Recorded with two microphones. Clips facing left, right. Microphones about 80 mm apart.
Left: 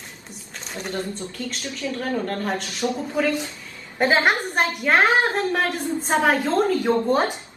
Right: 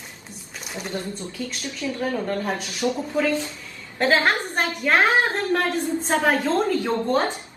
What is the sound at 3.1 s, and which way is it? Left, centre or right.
A woman's voice, centre.